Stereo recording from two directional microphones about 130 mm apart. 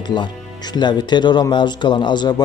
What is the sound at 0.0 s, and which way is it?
Speech, 35° left (ahead or behind).